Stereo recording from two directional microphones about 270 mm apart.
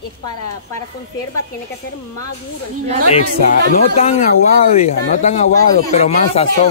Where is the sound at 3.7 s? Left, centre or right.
Left.